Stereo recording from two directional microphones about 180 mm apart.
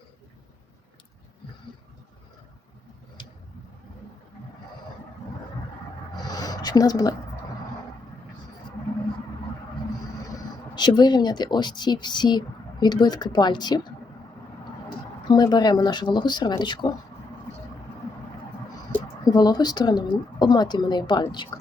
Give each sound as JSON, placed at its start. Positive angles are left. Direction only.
{"t": 6.1, "sound": "a sound", "side_deg": 20}
{"t": 10.8, "sound": "speech", "side_deg": 25}
{"t": 15.3, "sound": "speech", "side_deg": 20}
{"t": 19.2, "sound": "speech", "side_deg": 20}